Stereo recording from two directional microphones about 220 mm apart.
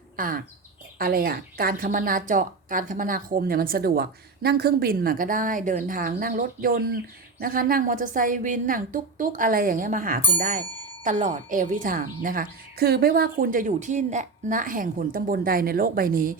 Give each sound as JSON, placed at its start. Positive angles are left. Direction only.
{"t": 0.2, "sound": "a woman's voice", "side_deg": -40}